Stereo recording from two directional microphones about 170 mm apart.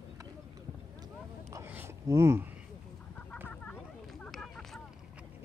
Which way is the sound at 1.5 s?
15° right (ahead or behind).